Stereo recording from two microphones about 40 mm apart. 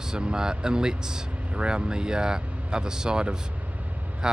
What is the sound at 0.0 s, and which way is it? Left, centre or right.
Speech, centre.